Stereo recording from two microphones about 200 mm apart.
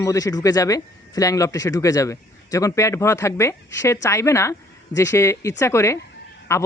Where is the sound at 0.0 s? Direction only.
15° left (ahead or behind).